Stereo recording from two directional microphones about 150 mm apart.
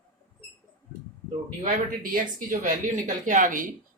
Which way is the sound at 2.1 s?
65° right (ahead or behind).